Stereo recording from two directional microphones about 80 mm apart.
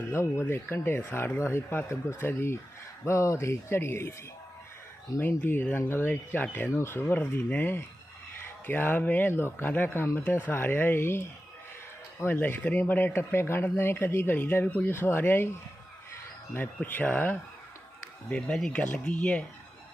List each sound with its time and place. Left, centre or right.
0.1 s speech: left
5.4 s speech: left
16.6 s speech: left